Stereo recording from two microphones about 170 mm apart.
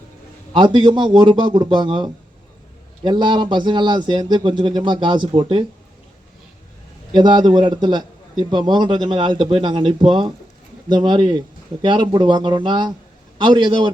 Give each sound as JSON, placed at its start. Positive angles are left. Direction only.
{"t": 0.5, "sound": "a man's voice", "side_deg": -30}
{"t": 7.1, "sound": "a man's voice", "side_deg": -25}